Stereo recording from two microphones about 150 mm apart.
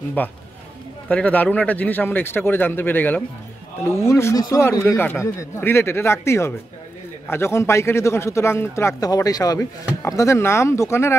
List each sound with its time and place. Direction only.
0.2 s a man's voice: 10° left (ahead or behind)